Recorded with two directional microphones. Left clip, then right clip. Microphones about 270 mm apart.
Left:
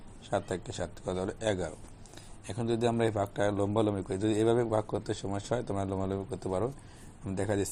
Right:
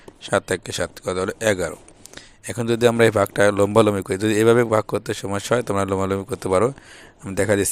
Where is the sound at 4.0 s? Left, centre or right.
Right.